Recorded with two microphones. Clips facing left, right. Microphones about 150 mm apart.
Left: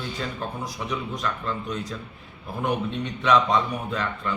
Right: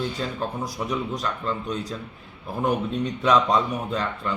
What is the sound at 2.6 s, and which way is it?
A man's voice, 40° right (ahead or behind).